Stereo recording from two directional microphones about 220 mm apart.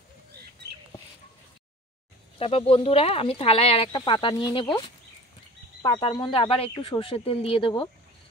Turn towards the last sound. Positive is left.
turn(degrees=25)  # may be behind; listen again after turning